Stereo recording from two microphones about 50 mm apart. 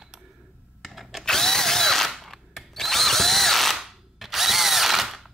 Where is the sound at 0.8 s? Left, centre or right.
Centre.